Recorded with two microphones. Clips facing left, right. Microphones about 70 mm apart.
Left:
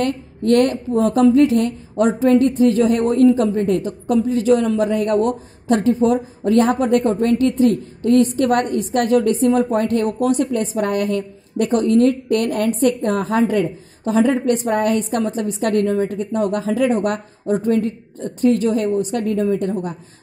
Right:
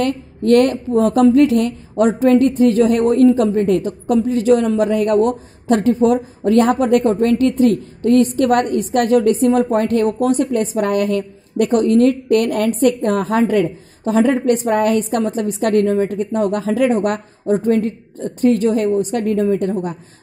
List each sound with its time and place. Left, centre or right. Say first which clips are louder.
0.0 s a woman's voice: right 2 dB; right
17.0 s a woman's voice: right 2 dB; right